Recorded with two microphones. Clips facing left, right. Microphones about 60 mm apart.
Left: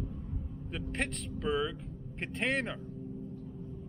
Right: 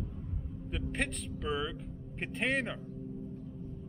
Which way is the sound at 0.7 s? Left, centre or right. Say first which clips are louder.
Even; centre.